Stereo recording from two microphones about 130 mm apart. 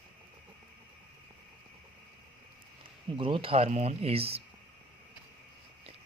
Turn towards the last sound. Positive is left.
turn(degrees=-50)  # may be behind; listen again after turning